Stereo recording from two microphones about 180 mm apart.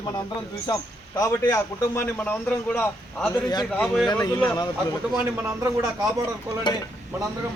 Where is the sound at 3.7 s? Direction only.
5° left (ahead or behind).